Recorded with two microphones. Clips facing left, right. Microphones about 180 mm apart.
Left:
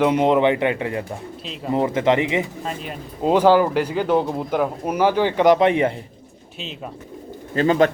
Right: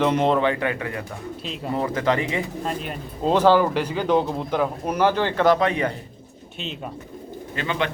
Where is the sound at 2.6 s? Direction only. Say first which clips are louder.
Right 1 dB; centre (ahead or behind); by 5.9 s 25° left (ahead or behind).